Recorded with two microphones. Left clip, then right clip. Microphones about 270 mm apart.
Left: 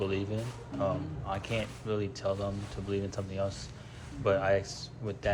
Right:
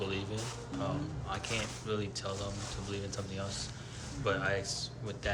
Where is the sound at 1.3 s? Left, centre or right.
Centre.